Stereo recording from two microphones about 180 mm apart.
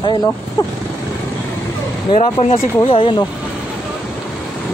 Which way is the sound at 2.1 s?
35° left (ahead or behind).